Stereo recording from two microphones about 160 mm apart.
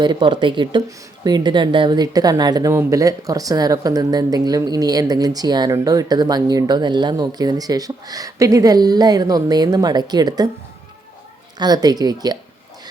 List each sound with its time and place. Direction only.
0.0 s speech: 30° right (ahead or behind)
11.5 s speech: 25° right (ahead or behind)